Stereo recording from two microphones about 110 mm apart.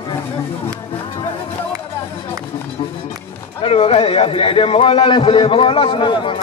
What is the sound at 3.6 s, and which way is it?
A man's voice, 60° left (ahead or behind).